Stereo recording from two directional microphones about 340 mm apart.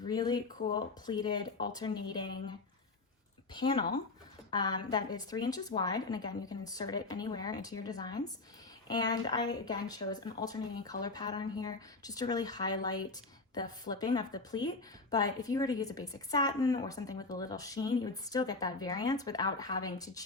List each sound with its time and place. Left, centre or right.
0.0 s speech: centre